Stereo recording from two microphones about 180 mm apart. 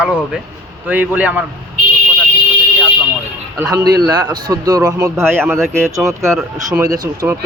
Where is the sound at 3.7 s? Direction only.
20° right (ahead or behind).